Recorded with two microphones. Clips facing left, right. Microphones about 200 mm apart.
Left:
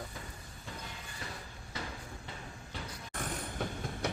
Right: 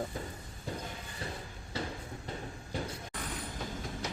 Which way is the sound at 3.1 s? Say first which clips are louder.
Left 1 dB; 55° left (ahead or behind).